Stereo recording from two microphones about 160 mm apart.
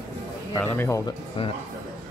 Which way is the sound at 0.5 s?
10° left (ahead or behind).